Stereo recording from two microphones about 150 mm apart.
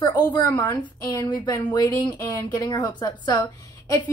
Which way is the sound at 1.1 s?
30° left (ahead or behind).